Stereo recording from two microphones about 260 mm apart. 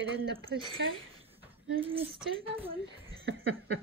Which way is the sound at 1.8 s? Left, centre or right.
Right.